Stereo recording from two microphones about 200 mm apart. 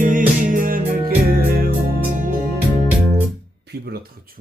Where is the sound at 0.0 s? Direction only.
40° right (ahead or behind).